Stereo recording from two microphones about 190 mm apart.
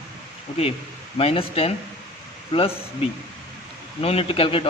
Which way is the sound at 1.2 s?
30° left (ahead or behind).